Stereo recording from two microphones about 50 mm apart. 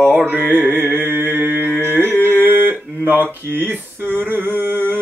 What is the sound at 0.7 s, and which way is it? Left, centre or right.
Mantra, right.